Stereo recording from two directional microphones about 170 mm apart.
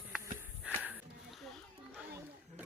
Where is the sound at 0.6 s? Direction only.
5° right (ahead or behind).